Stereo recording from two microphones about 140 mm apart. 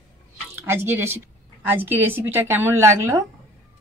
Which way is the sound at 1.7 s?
15° right (ahead or behind).